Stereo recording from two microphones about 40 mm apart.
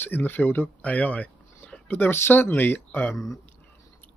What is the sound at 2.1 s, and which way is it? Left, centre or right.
Speech, left.